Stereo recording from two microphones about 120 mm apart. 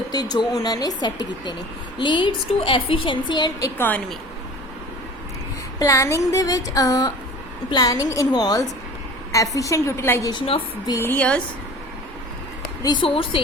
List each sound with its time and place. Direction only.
0.1 s a woman's voice: 35° left (ahead or behind)
3.8 s a woman's voice: 15° left (ahead or behind)
5.8 s a woman's voice: 25° left (ahead or behind)
10.3 s a woman's voice: 50° left (ahead or behind)
11.0 s a woman's voice: 15° left (ahead or behind)
12.8 s a woman's voice: 40° left (ahead or behind)